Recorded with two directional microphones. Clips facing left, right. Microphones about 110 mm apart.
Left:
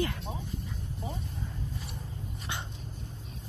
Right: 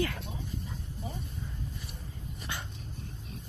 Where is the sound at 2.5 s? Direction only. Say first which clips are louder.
Left 1 dB; 20° left (ahead or behind).